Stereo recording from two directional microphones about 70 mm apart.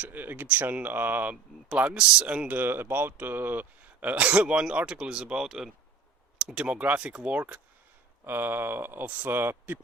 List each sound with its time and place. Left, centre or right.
0.0 s speech: right
8.2 s speech: right